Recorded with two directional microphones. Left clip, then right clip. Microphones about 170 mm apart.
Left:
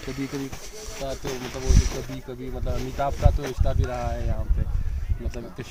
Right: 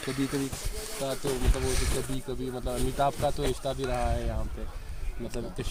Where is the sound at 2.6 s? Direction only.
15° left (ahead or behind).